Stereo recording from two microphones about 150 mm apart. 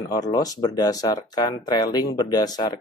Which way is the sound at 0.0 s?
25° left (ahead or behind).